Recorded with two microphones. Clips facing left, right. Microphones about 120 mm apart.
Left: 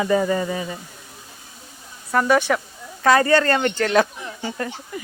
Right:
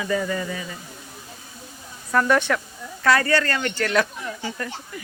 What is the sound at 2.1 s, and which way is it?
Speech, 10° left (ahead or behind).